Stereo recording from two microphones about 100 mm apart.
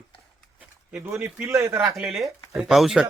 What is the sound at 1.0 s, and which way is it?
Speech, 25° right (ahead or behind).